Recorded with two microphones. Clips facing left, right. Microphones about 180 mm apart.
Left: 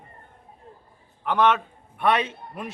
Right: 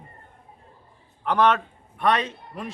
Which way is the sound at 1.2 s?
5° left (ahead or behind).